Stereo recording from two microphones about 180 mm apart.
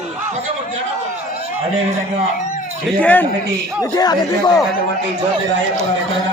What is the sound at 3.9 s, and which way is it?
Speech, 20° left (ahead or behind).